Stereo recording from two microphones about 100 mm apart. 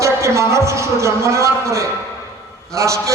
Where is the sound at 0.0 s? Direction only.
30° right (ahead or behind).